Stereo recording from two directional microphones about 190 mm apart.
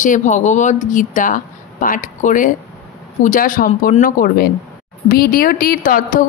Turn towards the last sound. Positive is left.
turn(degrees=45)  # may be behind; listen again after turning